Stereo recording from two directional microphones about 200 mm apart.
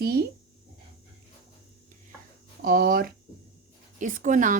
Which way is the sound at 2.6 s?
50° right (ahead or behind).